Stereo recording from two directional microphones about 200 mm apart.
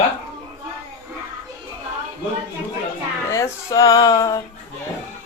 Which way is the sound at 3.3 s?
15° left (ahead or behind).